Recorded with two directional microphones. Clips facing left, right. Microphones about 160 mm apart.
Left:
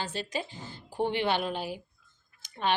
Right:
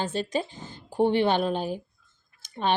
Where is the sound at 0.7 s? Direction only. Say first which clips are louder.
Right 7 dB; 15° right (ahead or behind).